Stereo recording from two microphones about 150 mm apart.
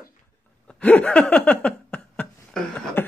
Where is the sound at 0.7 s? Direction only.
10° left (ahead or behind).